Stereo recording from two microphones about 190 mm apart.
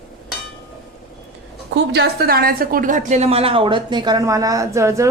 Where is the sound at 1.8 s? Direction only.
60° right (ahead or behind).